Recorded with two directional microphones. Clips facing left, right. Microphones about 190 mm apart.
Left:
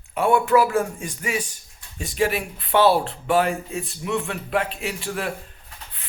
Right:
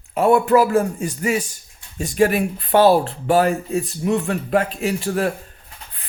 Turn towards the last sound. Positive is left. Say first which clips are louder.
# right 7 dB
turn(degrees=-40)  # may be behind; listen again after turning